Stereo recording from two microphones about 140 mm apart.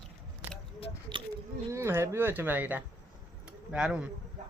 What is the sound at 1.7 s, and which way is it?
A man's voice, 20° right (ahead or behind).